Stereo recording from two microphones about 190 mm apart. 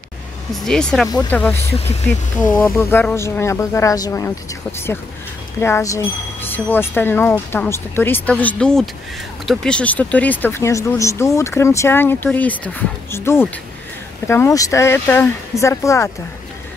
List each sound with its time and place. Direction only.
0.7 s speech: 5° left (ahead or behind)
5.6 s speech: 15° left (ahead or behind)